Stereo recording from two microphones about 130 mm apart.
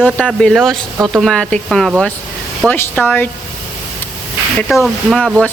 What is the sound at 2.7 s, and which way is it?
Speech, 15° left (ahead or behind).